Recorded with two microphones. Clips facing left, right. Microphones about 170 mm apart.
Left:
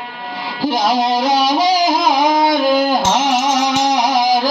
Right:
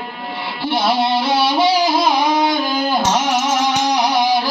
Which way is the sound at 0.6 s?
40° left (ahead or behind).